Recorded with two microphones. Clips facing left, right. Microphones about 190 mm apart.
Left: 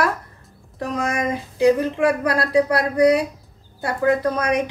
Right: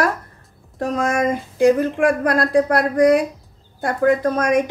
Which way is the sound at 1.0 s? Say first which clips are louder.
Right 4 dB; 50° right (ahead or behind).